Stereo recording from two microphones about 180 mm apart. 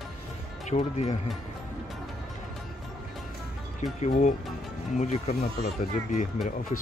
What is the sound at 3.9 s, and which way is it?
Speech, 40° left (ahead or behind).